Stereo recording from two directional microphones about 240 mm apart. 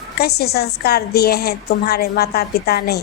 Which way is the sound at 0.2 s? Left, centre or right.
Left.